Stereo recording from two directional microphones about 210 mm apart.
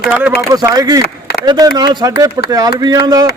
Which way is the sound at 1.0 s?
50° left (ahead or behind).